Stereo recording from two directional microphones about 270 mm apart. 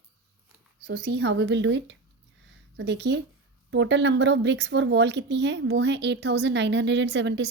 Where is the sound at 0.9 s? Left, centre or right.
Right.